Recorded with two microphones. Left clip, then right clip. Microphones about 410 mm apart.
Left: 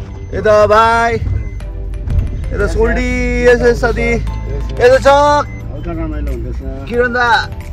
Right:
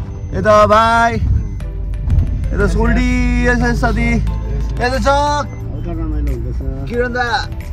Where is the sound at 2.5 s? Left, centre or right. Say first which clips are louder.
Left 3 dB; centre.